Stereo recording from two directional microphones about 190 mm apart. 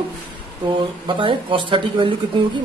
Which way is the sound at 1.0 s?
25° right (ahead or behind).